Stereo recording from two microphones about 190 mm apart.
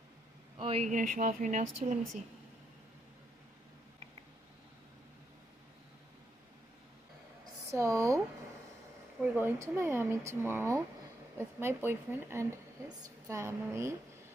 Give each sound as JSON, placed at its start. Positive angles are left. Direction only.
{"t": 0.6, "sound": "speech", "side_deg": -30}
{"t": 7.7, "sound": "a woman's voice", "side_deg": -15}
{"t": 9.2, "sound": "a woman's voice", "side_deg": -10}